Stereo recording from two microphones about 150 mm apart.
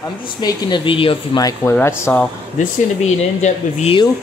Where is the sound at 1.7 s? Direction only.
15° left (ahead or behind).